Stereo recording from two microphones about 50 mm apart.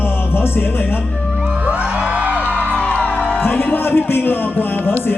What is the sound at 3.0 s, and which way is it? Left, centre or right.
Speech, left.